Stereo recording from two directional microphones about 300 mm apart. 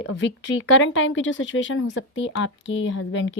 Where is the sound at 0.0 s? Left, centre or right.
Left.